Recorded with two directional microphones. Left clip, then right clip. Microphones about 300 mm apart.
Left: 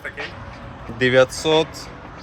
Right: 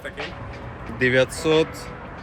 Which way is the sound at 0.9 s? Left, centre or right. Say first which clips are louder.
Left 4 dB; left.